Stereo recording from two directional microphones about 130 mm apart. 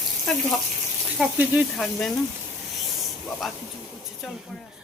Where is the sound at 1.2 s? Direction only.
10° right (ahead or behind).